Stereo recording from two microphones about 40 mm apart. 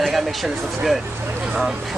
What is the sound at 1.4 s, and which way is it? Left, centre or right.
Speech, centre.